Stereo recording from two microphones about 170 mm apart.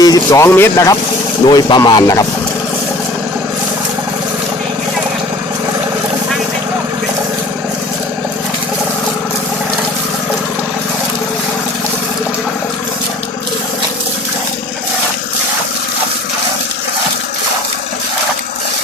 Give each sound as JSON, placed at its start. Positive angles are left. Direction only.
{"t": 0.0, "sound": "speech", "side_deg": 20}
{"t": 1.5, "sound": "speech", "side_deg": 25}